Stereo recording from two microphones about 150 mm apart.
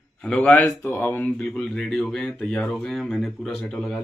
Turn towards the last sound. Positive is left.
turn(degrees=5)  # may be behind; listen again after turning